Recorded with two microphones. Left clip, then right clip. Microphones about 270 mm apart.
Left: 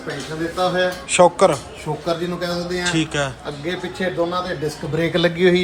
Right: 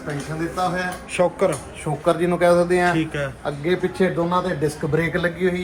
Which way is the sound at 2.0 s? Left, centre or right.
Centre.